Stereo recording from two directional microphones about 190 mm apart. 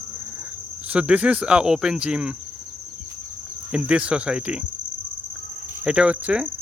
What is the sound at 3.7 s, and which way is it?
Speech, 5° right (ahead or behind).